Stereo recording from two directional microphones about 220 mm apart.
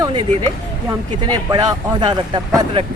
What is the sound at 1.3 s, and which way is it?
Speech, 15° right (ahead or behind).